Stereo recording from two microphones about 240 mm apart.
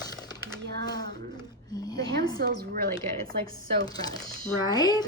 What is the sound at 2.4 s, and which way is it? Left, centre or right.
Speech, right.